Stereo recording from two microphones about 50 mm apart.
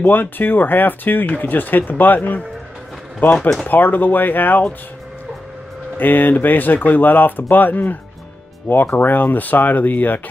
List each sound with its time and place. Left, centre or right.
0.0 s speech: left
3.3 s speech: centre
3.6 s speech: left
5.9 s speech: left